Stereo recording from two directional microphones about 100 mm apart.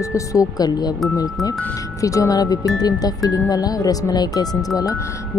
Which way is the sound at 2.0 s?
35° left (ahead or behind).